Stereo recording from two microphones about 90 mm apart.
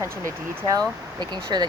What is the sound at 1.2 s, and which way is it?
Speech, 55° right (ahead or behind).